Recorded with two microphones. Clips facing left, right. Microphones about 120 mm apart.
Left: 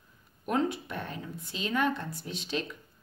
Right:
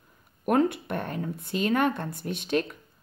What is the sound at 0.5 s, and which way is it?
Speech, 55° right (ahead or behind).